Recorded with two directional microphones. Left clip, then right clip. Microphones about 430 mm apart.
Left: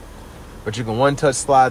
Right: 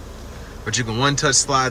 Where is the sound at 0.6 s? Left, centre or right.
Centre.